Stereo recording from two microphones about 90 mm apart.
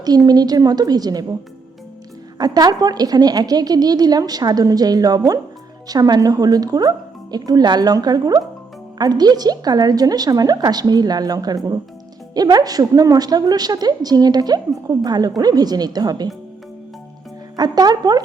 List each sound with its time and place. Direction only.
0.3 s a woman's voice: 50° right (ahead or behind)
2.4 s a woman's voice: 45° right (ahead or behind)
17.6 s a woman's voice: 50° right (ahead or behind)